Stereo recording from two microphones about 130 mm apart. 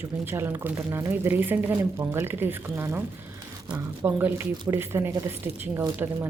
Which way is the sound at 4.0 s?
15° right (ahead or behind).